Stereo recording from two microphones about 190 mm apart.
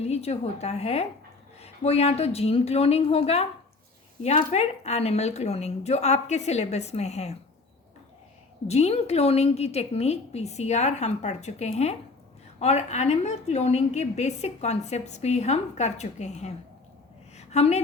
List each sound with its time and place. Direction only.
0.0 s a woman's voice: 35° left (ahead or behind)
8.6 s a woman's voice: 35° left (ahead or behind)
17.3 s a sound: 35° left (ahead or behind)